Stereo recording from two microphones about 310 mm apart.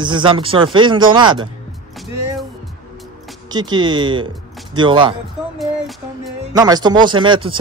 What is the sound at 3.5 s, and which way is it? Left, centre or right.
Speech, centre.